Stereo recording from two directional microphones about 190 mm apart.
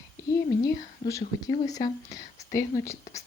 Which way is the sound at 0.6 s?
15° left (ahead or behind).